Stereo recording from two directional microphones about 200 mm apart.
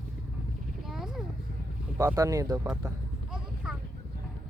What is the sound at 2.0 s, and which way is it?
Speech, 15° right (ahead or behind).